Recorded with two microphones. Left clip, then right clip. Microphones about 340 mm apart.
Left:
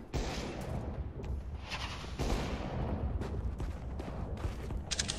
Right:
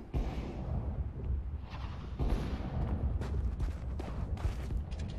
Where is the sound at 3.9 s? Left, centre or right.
Centre.